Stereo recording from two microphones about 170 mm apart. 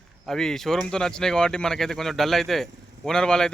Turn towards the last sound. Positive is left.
turn(degrees=5)  # may be behind; listen again after turning